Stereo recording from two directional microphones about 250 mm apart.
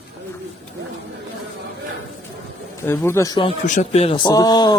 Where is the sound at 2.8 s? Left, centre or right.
Centre.